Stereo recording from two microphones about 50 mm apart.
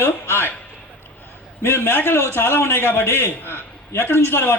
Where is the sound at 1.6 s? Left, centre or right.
Left.